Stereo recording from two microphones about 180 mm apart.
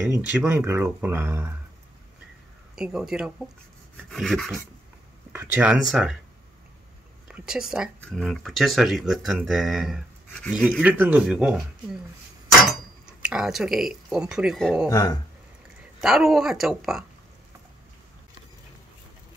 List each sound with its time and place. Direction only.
0.0 s speech: 10° right (ahead or behind)
2.7 s speech: 5° right (ahead or behind)
5.3 s speech: 10° right (ahead or behind)
7.2 s speech: 5° right (ahead or behind)
13.2 s speech: 5° right (ahead or behind)
14.9 s speech: 20° left (ahead or behind)
16.0 s speech: centre (ahead or behind)